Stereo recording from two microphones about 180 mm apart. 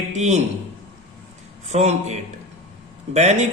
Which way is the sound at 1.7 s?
40° right (ahead or behind).